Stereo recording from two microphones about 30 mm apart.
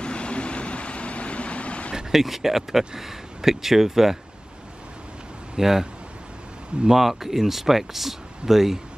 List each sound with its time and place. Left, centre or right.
0.0 s vehicle: left
2.1 s speech: centre
5.6 s speech: centre
6.9 s speech: centre